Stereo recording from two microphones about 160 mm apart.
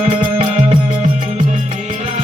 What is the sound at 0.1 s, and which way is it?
Music, 35° right (ahead or behind).